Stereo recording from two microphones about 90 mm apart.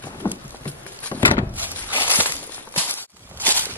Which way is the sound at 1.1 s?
45° left (ahead or behind).